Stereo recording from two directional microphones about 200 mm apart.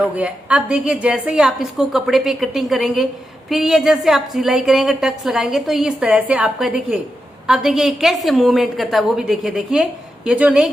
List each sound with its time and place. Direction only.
0.0 s a woman's voice: 5° right (ahead or behind)